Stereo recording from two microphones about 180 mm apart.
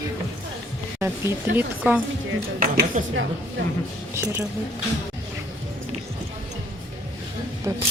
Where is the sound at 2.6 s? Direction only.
50° right (ahead or behind).